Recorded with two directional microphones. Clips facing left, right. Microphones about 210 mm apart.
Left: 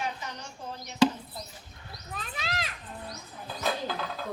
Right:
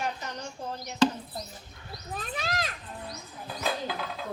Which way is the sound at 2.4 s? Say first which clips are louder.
Right 2 dB; 45° right (ahead or behind).